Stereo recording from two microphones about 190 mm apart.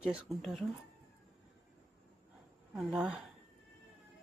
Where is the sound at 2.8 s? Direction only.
5° right (ahead or behind).